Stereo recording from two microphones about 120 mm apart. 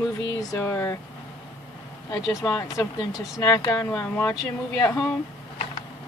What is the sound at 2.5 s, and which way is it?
Speech, 30° left (ahead or behind).